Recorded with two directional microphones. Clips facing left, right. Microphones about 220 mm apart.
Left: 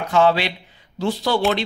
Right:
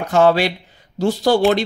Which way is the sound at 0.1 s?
45° right (ahead or behind).